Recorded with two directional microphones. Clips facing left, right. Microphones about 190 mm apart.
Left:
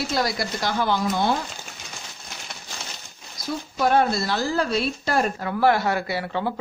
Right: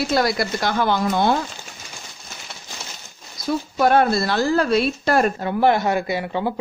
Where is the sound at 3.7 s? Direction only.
60° right (ahead or behind).